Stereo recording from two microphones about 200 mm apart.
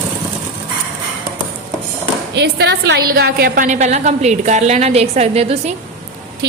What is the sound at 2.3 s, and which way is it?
A woman's voice, 60° right (ahead or behind).